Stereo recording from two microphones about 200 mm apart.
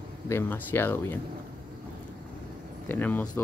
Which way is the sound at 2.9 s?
10° left (ahead or behind).